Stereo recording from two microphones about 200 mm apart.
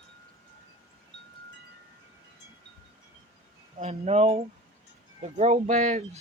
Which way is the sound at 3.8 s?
30° right (ahead or behind).